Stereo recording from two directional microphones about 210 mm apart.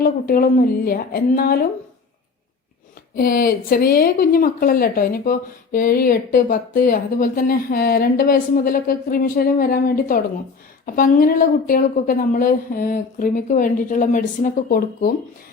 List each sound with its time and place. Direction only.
0.0 s speech: 45° left (ahead or behind)
3.2 s a woman's voice: 45° left (ahead or behind)